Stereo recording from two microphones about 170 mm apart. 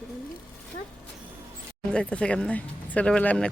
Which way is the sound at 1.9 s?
5° left (ahead or behind).